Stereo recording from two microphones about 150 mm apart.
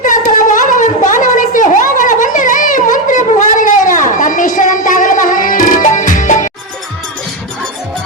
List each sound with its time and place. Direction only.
0.0 s wind instrument: 60° left (ahead or behind)